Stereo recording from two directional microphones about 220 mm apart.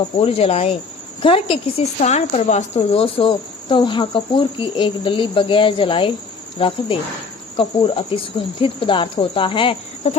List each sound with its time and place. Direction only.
0.2 s a woman's voice: 25° left (ahead or behind)